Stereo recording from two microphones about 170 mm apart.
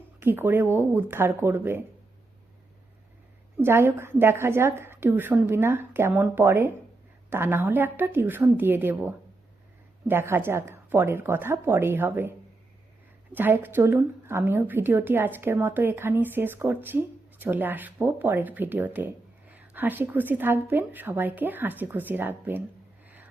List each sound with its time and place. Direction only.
0.2 s a woman's voice: 15° right (ahead or behind)
3.6 s a woman's voice: 15° right (ahead or behind)
13.3 s a woman's voice: 10° right (ahead or behind)
23.0 s music: 10° right (ahead or behind)